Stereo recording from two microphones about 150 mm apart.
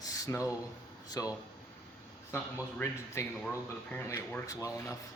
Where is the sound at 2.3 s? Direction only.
15° left (ahead or behind).